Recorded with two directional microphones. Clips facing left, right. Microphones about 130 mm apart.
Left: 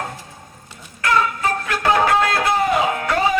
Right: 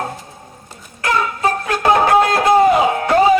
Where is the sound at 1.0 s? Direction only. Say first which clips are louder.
Right 1 dB; 30° right (ahead or behind).